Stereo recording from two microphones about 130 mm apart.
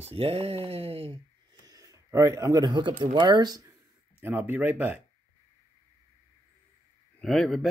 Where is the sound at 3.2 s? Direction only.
35° right (ahead or behind).